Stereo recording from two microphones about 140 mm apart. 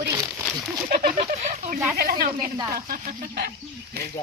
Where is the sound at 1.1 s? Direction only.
60° right (ahead or behind).